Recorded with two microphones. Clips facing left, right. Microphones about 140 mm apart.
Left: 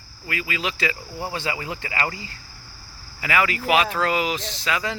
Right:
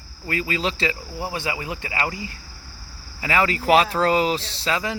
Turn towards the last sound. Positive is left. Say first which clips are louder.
# right 1 dB
turn(degrees=-30)  # may be behind; listen again after turning